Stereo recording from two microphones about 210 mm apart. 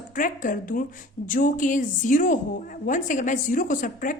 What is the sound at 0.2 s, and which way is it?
A woman's voice, 40° left (ahead or behind).